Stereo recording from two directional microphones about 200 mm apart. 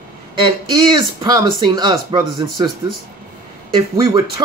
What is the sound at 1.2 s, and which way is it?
Speech, 20° right (ahead or behind).